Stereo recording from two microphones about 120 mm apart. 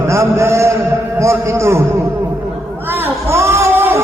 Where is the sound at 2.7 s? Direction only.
15° right (ahead or behind).